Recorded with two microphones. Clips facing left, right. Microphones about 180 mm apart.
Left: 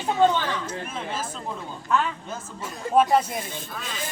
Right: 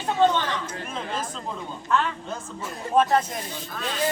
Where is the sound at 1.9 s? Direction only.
5° left (ahead or behind).